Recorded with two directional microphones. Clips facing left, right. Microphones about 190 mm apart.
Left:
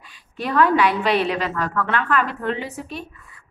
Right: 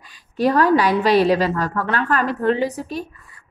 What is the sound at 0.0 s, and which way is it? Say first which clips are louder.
A woman's voice: right 10 dB; 40° right (ahead or behind).